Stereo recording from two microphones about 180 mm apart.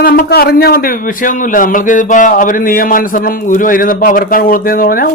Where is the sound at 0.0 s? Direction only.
55° left (ahead or behind).